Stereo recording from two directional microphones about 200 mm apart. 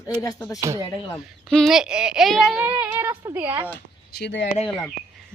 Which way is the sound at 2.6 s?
10° right (ahead or behind).